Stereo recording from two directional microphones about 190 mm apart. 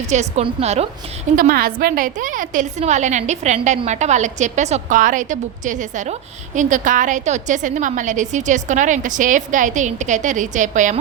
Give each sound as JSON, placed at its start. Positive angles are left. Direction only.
{"t": 0.1, "sound": "a woman's voice", "side_deg": -35}
{"t": 1.4, "sound": "a woman's voice", "side_deg": -50}